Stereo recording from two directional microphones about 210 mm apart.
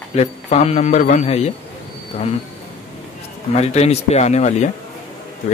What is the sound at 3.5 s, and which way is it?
A man's voice, 30° left (ahead or behind).